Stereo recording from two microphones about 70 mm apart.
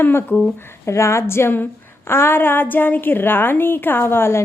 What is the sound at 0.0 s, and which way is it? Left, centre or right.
A woman's voice, left.